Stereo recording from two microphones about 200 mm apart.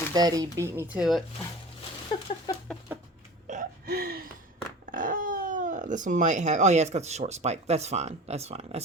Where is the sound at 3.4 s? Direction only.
40° right (ahead or behind).